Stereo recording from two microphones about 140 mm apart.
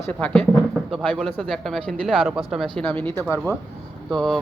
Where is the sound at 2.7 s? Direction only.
10° left (ahead or behind).